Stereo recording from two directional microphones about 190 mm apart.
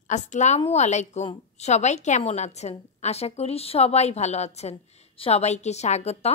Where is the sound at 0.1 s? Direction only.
40° left (ahead or behind).